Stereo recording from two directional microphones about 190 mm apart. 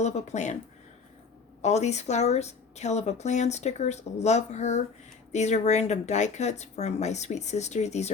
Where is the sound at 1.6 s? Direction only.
35° left (ahead or behind).